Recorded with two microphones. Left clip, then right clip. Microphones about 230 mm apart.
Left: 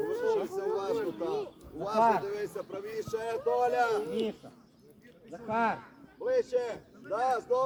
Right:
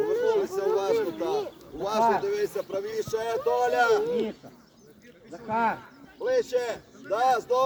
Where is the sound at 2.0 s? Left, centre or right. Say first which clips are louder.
Right 2 dB; left.